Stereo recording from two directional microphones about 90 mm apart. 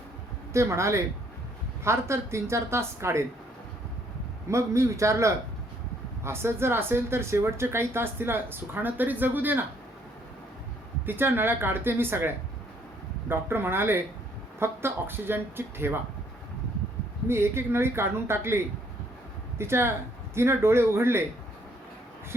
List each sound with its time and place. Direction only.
0.5 s a woman's voice: 35° right (ahead or behind)
4.4 s a woman's voice: 35° right (ahead or behind)
11.0 s speech: 20° right (ahead or behind)
17.2 s speech: 30° right (ahead or behind)